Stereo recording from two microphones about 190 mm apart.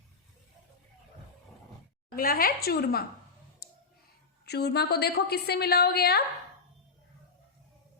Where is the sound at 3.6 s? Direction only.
60° left (ahead or behind).